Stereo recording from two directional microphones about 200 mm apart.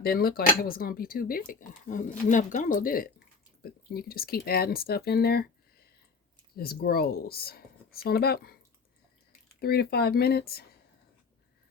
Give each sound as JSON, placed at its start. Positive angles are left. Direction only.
{"t": 0.0, "sound": "speech", "side_deg": 50}
{"t": 9.6, "sound": "speech", "side_deg": 50}